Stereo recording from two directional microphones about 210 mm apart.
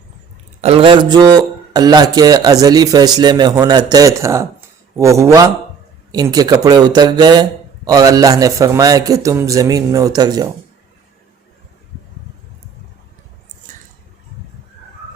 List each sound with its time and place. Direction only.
0.6 s a man's voice: 25° right (ahead or behind)